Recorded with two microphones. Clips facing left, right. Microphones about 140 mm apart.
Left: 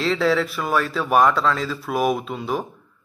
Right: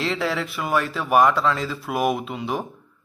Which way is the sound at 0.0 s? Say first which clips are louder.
Left 5 dB; 15° right (ahead or behind).